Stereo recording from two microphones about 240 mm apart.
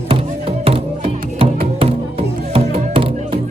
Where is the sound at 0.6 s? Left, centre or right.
Right.